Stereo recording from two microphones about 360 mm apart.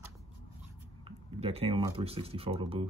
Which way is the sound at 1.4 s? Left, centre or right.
Centre.